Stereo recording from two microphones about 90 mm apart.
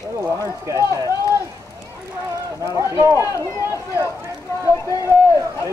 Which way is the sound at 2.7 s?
35° right (ahead or behind).